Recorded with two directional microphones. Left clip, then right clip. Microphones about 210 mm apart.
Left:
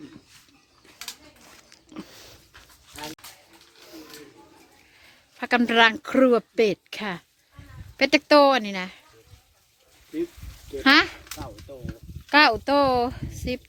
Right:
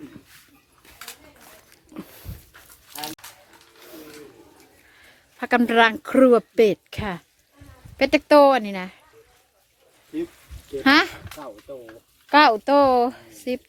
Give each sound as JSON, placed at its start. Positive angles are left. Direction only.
{"t": 1.5, "sound": "a sound", "side_deg": 0}
{"t": 5.4, "sound": "a woman's voice", "side_deg": -5}
{"t": 10.8, "sound": "a woman's voice", "side_deg": -5}
{"t": 12.3, "sound": "a woman's voice", "side_deg": 0}